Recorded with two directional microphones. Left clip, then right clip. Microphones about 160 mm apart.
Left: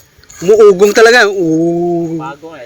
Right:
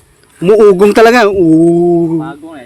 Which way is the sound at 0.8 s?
30° right (ahead or behind).